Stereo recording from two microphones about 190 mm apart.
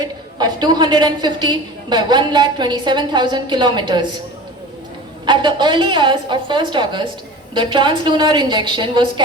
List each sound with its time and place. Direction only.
0.3 s a woman's voice: 20° right (ahead or behind)
5.2 s a woman's voice: 25° right (ahead or behind)